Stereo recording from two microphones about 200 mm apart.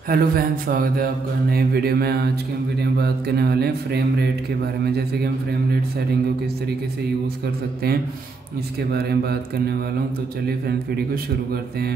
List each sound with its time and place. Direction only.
0.1 s mantra: 45° right (ahead or behind)
8.9 s mantra: 50° right (ahead or behind)